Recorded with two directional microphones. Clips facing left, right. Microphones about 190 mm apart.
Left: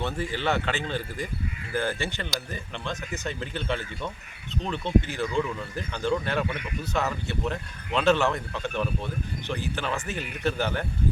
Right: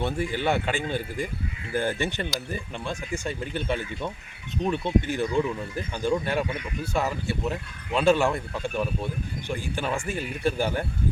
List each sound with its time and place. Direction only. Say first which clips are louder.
0.0 s speech: right 2 dB; 15° right (ahead or behind)